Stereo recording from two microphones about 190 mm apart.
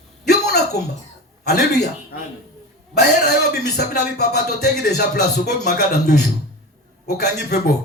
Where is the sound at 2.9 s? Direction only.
60° left (ahead or behind).